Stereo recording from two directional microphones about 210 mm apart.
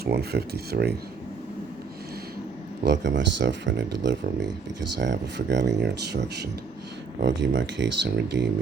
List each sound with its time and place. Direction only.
0.0 s speech: 50° right (ahead or behind)
2.8 s speech: 55° right (ahead or behind)